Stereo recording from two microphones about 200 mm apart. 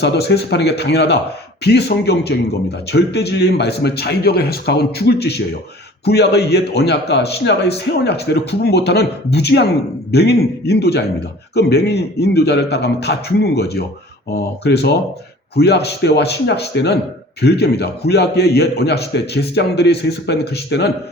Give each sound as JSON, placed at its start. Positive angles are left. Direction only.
{"t": 0.0, "sound": "a man's voice", "side_deg": 55}